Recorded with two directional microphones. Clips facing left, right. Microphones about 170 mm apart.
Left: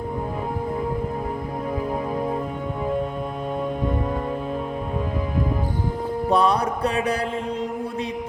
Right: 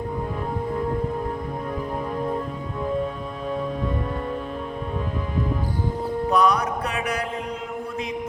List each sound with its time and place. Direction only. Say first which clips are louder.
6.3 s mantra: left 1 dB; 30° left (ahead or behind)